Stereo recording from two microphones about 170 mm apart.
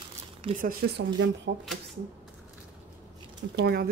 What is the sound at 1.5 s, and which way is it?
Speech, 85° right.